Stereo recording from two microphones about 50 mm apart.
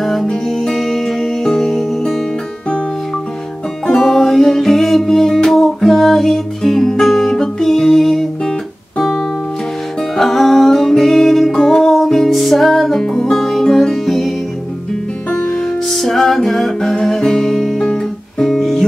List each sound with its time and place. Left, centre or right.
0.0 s music: centre
3.8 s music: centre
15.3 s music: centre
15.9 s music: centre